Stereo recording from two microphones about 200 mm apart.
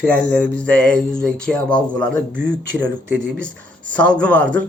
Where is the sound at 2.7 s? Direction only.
70° right (ahead or behind).